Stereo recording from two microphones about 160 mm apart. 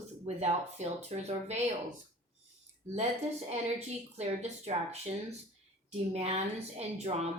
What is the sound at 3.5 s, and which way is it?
A woman's voice, 45° right (ahead or behind).